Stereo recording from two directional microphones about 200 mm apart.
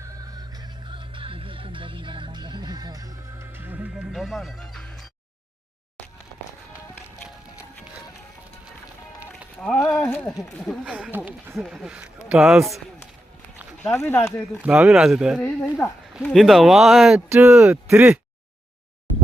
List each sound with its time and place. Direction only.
0.0 s music: 15° right (ahead or behind); by 5.0 s centre (ahead or behind)
9.3 s a sound: centre (ahead or behind)
10.6 s speech: centre (ahead or behind)
13.8 s speech: 15° left (ahead or behind)
14.6 s speech: 5° right (ahead or behind)